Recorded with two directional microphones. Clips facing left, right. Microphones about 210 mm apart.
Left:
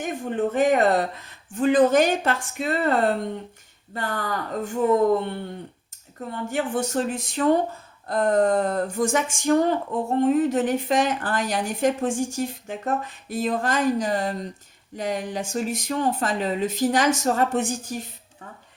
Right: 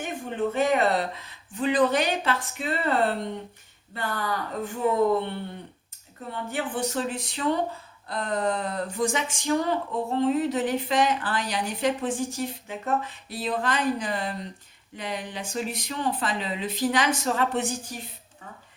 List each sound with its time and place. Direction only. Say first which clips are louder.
0.0 s a sound: left 3 dB; 50° left (ahead or behind)
0.7 s speech: left 4 dB; 45° left (ahead or behind)
6.5 s speech: left 4 dB; 45° left (ahead or behind)